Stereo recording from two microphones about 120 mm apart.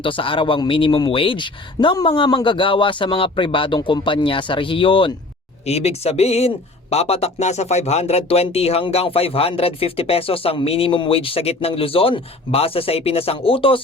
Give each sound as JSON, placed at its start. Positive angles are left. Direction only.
{"t": 0.0, "sound": "speech", "side_deg": 45}
{"t": 5.6, "sound": "speech", "side_deg": 60}